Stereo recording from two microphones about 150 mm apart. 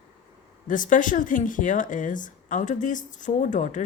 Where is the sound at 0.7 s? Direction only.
60° left (ahead or behind).